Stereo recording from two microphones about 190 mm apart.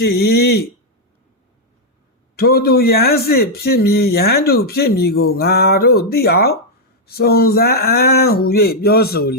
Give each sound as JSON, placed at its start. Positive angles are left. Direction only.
{"t": 0.0, "sound": "a man's voice", "side_deg": 55}
{"t": 2.3, "sound": "a man's voice", "side_deg": 55}